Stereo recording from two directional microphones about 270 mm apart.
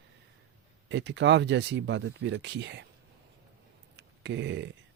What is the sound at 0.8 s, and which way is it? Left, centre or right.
Speech, right.